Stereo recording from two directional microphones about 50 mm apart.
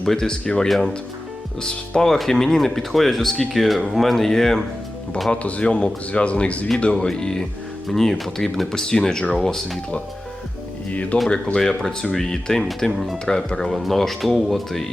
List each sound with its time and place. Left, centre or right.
0.0 s speech: centre
0.7 s speech: centre
2.0 s speech: centre
5.3 s speech: left; by 9.7 s centre
10.9 s speech: left
11.5 s speech: centre
12.9 s speech: centre
13.3 s speech: centre
13.7 s speech: centre